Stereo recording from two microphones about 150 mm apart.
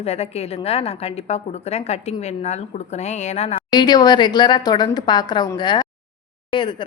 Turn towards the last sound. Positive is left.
turn(degrees=30)  # may be behind; listen again after turning